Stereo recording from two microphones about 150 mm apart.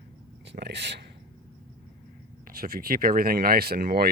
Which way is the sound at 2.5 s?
75° right (ahead or behind).